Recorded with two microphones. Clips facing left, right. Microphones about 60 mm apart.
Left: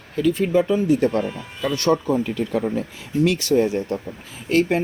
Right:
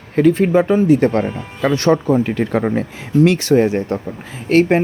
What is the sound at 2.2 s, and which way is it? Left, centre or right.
Speech, right.